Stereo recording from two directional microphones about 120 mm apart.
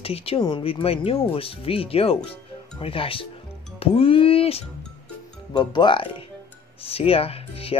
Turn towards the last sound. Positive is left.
turn(degrees=55)  # may be behind; listen again after turning